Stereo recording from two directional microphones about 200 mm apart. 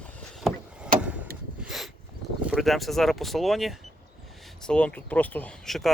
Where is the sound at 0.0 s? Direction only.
5° left (ahead or behind).